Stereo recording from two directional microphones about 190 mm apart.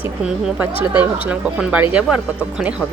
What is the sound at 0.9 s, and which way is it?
Speech, 5° right (ahead or behind).